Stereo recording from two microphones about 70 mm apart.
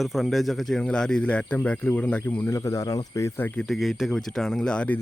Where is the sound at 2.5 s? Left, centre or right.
Left.